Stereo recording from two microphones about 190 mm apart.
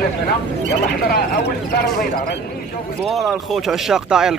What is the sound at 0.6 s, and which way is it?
Speech, 55° left (ahead or behind).